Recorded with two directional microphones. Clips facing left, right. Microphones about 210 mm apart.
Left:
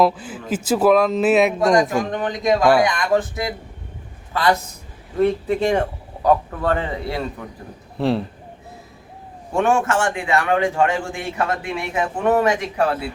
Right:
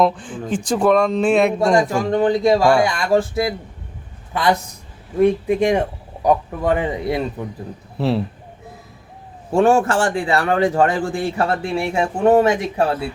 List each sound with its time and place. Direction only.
0.0 s speech: 5° left (ahead or behind)
1.7 s a man's voice: 30° right (ahead or behind)
5.2 s a man's voice: 15° right (ahead or behind)
7.9 s speech: centre (ahead or behind)
9.5 s a man's voice: 30° right (ahead or behind)